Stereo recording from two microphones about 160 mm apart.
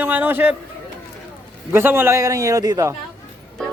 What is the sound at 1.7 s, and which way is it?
A man's voice, 15° right (ahead or behind).